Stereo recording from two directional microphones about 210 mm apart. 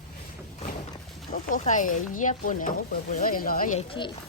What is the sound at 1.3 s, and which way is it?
Speech, 40° left (ahead or behind).